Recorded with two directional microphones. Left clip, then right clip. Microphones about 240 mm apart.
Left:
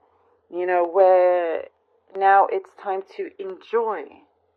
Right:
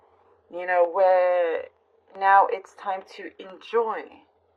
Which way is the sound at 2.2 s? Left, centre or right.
Left.